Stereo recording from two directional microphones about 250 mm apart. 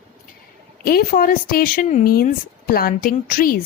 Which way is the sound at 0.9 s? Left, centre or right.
Left.